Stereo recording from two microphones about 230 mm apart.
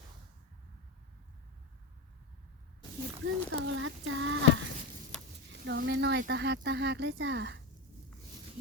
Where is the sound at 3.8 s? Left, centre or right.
Right.